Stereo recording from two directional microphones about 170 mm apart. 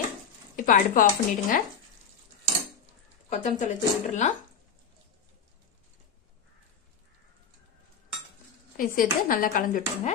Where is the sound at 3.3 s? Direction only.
45° left (ahead or behind).